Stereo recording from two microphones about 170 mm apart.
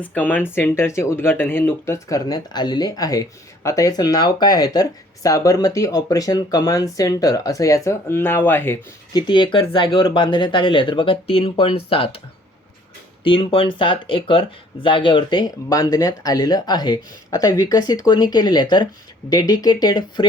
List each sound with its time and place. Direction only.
0.0 s speech: 10° left (ahead or behind)
9.2 s speech: 25° left (ahead or behind)
13.2 s speech: 30° left (ahead or behind)